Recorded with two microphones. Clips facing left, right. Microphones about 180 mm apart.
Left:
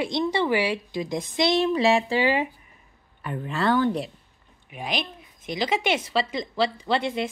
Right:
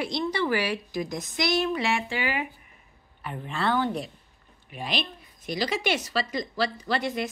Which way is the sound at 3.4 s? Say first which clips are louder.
Left 4 dB; 40° left (ahead or behind).